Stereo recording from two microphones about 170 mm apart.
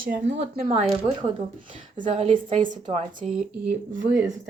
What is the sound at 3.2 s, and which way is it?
Speech, 40° right (ahead or behind).